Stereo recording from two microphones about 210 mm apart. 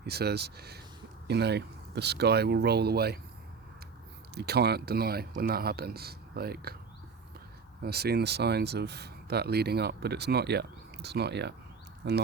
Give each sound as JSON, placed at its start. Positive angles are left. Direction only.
{"t": 0.0, "sound": "speech", "side_deg": -50}
{"t": 4.4, "sound": "speech", "side_deg": -50}
{"t": 7.8, "sound": "speech", "side_deg": -50}